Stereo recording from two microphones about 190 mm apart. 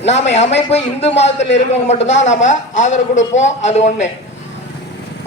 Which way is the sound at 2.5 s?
40° left (ahead or behind).